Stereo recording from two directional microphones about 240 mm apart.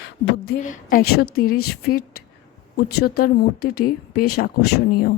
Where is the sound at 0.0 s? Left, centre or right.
Left.